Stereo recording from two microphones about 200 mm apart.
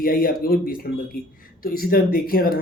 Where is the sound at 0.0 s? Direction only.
45° left (ahead or behind).